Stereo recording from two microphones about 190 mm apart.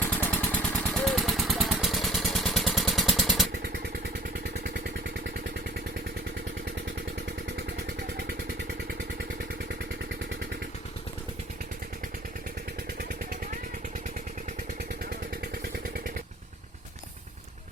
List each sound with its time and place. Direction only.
0.0 s vehicle: 10° left (ahead or behind)
3.5 s vehicle: 60° right (ahead or behind)
13.0 s vehicle: 50° right (ahead or behind)